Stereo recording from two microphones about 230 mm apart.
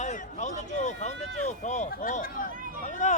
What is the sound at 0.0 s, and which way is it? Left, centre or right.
Speech, left.